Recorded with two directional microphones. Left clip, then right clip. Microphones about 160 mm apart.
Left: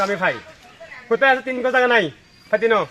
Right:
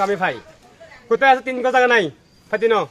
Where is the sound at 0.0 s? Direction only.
30° right (ahead or behind).